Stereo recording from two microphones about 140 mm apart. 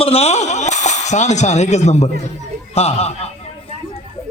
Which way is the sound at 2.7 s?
45° left (ahead or behind).